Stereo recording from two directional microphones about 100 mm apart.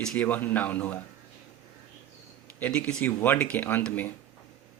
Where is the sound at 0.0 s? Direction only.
10° left (ahead or behind).